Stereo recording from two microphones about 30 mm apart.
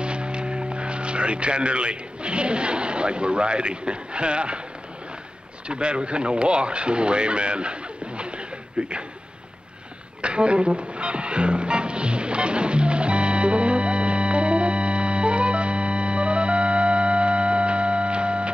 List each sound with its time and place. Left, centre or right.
0.0 s speech: right
5.7 s speech: right
8.2 s a sound: right
10.2 s music: right